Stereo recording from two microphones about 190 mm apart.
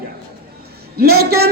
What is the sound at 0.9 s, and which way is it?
Speech, 55° right (ahead or behind).